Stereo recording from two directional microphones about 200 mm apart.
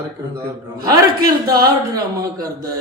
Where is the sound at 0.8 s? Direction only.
20° right (ahead or behind).